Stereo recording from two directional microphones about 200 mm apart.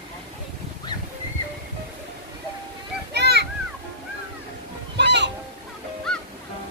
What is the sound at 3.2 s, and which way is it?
Children playing, 55° right (ahead or behind).